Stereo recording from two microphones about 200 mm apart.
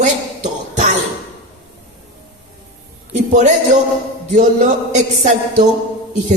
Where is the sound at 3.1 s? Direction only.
35° right (ahead or behind).